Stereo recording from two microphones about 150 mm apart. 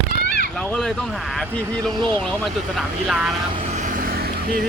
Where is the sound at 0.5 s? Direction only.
10° left (ahead or behind).